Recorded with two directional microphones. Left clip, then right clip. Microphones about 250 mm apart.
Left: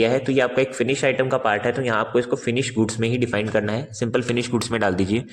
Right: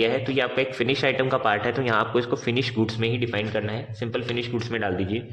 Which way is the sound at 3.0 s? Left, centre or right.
Centre.